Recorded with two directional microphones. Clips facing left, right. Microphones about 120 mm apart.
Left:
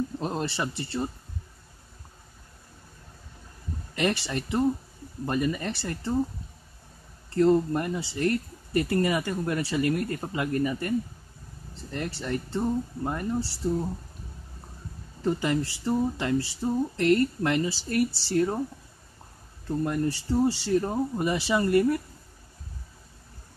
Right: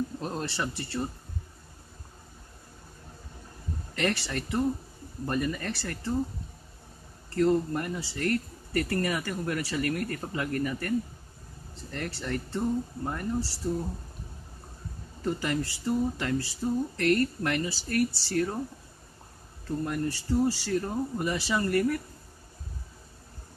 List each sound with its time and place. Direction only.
0.2 s speech: 20° left (ahead or behind)
3.9 s speech: 15° left (ahead or behind)
7.2 s speech: 20° left (ahead or behind)
15.2 s speech: 20° left (ahead or behind)
19.8 s speech: 20° left (ahead or behind)